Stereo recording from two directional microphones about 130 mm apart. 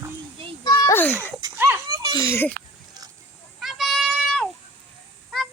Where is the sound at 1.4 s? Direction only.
20° right (ahead or behind).